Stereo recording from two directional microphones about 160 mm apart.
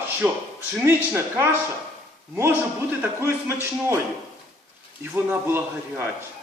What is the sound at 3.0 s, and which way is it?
Speech, 15° right (ahead or behind).